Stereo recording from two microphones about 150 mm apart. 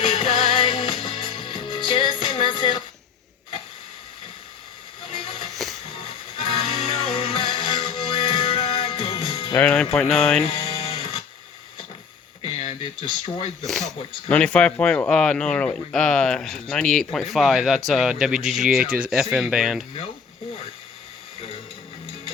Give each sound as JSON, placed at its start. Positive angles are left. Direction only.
{"t": 0.0, "sound": "music", "side_deg": 40}
{"t": 5.0, "sound": "train", "side_deg": 40}
{"t": 6.0, "sound": "music", "side_deg": 40}
{"t": 9.6, "sound": "music", "side_deg": 10}
{"t": 10.4, "sound": "music", "side_deg": 40}
{"t": 12.4, "sound": "a sound", "side_deg": 40}
{"t": 13.7, "sound": "speech", "side_deg": 5}